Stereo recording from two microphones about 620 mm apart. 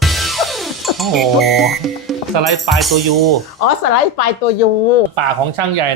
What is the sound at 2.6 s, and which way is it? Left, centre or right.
Music, centre.